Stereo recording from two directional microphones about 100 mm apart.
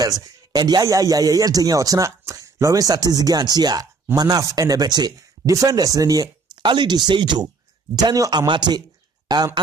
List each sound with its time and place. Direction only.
0.0 s speech: 40° right (ahead or behind)
7.9 s speech: 40° right (ahead or behind)